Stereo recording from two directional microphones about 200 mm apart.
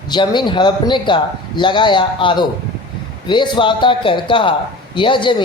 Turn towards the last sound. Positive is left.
turn(degrees=25)  # may be behind; listen again after turning